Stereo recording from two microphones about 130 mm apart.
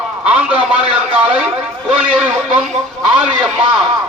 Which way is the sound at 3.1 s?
5° right (ahead or behind).